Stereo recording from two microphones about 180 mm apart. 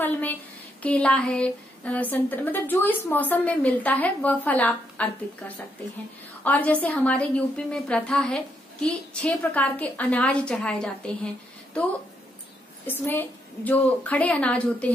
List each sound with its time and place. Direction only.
0.0 s a woman's voice: 10° left (ahead or behind)
6.4 s a woman's voice: 10° left (ahead or behind)
12.8 s a woman's voice: 10° left (ahead or behind)